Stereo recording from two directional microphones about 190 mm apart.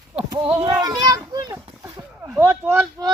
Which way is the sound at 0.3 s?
25° right (ahead or behind).